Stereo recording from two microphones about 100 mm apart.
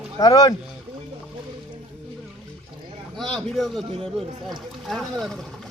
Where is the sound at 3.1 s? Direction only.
5° left (ahead or behind).